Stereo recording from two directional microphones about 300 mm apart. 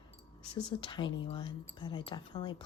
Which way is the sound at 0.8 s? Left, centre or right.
Centre.